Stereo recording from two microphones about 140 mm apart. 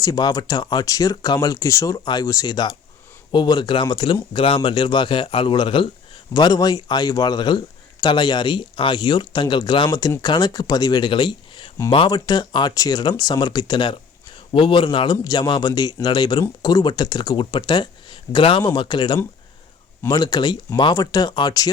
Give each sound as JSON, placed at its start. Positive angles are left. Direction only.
{"t": 0.0, "sound": "speech", "side_deg": 25}